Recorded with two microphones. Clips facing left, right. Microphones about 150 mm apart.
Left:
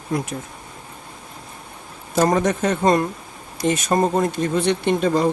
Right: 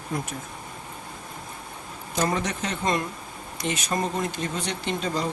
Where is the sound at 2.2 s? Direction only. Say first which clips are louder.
Left 8 dB; 45° left (ahead or behind).